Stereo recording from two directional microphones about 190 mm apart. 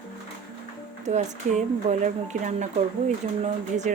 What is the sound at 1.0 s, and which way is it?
Speech, 40° right (ahead or behind).